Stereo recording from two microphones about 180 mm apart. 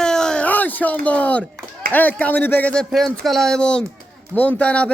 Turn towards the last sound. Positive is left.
turn(degrees=5)  # may be behind; listen again after turning